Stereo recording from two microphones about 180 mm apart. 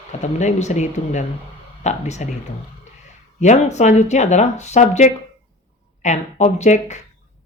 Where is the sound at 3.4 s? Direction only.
40° left (ahead or behind).